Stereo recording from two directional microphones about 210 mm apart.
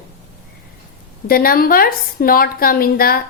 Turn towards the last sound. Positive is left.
turn(degrees=45)  # may be behind; listen again after turning